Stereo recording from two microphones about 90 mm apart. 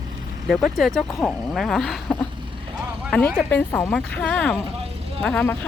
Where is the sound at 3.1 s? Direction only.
15° left (ahead or behind).